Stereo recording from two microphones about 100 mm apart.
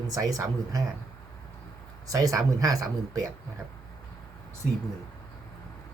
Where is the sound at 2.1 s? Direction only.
35° right (ahead or behind).